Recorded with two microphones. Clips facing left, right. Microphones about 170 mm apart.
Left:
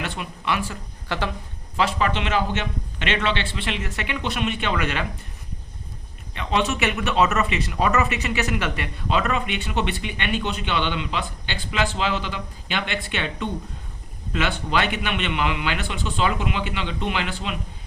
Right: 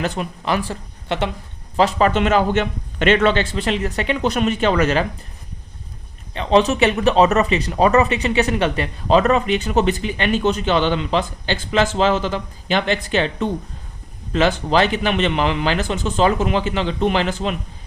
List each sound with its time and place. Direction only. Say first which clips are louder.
0.0 s speech: right 6 dB; 40° right (ahead or behind)
1.0 s speech: right 5 dB; 25° right (ahead or behind)
1.7 s speech: right 6 dB; 40° right (ahead or behind)
6.3 s speech: right 8 dB; 35° right (ahead or behind)